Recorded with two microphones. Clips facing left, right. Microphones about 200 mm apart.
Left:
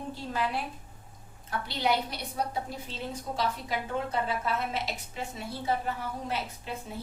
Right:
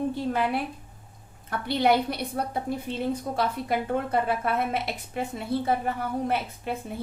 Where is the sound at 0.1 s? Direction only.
60° right (ahead or behind).